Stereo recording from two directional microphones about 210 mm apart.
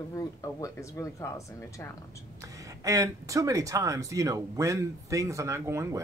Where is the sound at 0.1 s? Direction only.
15° left (ahead or behind).